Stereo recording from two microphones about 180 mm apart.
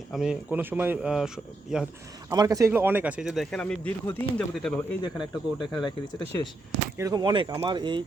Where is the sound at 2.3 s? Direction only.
20° right (ahead or behind); by 4.7 s 5° left (ahead or behind).